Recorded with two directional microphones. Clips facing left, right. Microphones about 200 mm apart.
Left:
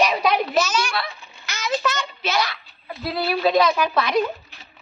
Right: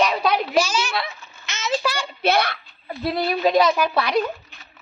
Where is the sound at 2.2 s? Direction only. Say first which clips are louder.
Right 5 dB; 60° right (ahead or behind).